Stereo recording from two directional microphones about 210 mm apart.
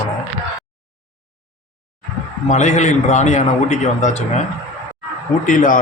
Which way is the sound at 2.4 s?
35° left (ahead or behind).